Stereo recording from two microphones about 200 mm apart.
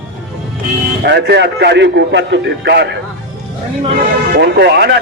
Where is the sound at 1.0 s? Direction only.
60° right (ahead or behind).